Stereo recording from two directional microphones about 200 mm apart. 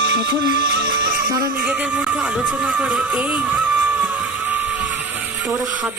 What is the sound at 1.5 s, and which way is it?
Speech, 5° right (ahead or behind).